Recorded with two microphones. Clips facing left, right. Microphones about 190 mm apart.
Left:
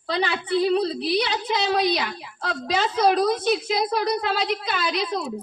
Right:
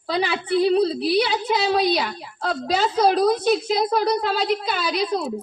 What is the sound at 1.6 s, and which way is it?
A woman's voice, 50° right (ahead or behind).